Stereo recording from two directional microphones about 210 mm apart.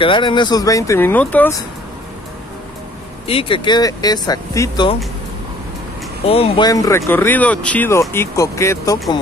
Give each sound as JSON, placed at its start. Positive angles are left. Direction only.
{"t": 0.0, "sound": "speech", "side_deg": 25}
{"t": 3.3, "sound": "speech", "side_deg": 25}
{"t": 6.2, "sound": "speech", "side_deg": 25}